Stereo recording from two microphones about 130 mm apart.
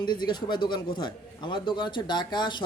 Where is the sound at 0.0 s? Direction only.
35° left (ahead or behind).